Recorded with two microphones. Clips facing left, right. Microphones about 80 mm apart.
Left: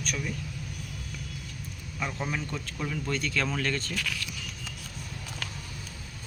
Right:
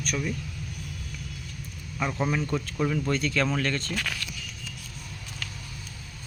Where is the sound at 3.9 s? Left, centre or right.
Right.